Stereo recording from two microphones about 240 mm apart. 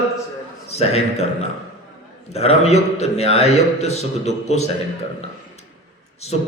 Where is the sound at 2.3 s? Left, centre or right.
Left.